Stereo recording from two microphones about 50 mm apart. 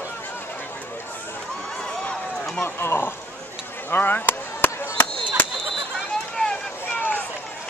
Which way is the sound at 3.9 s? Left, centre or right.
Left.